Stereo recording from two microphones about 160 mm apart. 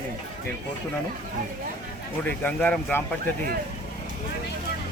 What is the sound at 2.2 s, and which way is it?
Speech, 10° left (ahead or behind).